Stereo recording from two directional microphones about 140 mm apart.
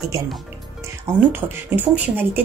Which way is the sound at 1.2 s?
10° right (ahead or behind).